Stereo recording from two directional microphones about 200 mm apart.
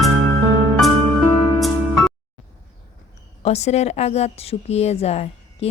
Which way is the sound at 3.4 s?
35° left (ahead or behind).